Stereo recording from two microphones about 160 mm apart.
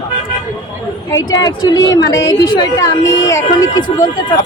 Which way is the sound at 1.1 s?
25° left (ahead or behind).